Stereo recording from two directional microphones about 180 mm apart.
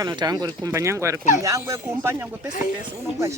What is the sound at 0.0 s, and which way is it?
Speech, 20° right (ahead or behind).